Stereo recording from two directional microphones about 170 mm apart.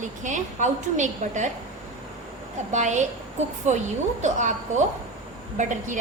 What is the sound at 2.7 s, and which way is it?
A woman's voice, 45° right (ahead or behind).